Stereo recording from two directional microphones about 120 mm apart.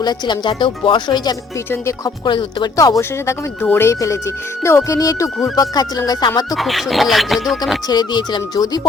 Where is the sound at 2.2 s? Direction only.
40° left (ahead or behind).